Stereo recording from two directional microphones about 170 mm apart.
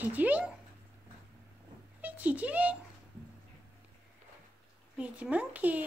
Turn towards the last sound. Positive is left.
turn(degrees=-10)  # may be behind; listen again after turning